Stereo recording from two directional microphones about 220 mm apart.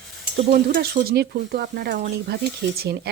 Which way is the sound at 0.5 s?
45° right (ahead or behind).